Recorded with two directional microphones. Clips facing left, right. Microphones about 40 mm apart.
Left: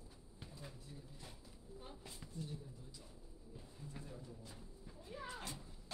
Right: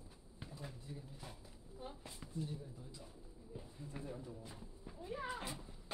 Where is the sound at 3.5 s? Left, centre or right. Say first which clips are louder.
Right 4 dB; centre.